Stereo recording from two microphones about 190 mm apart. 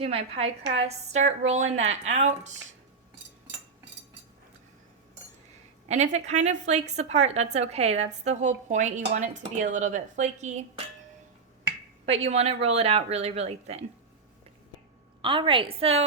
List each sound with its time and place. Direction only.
0.0 s a woman's voice: 30° right (ahead or behind)
5.9 s a woman's voice: 35° right (ahead or behind)
12.0 s a woman's voice: 30° right (ahead or behind)
15.2 s a woman's voice: 25° right (ahead or behind)